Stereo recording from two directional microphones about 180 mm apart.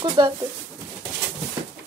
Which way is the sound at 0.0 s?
25° right (ahead or behind).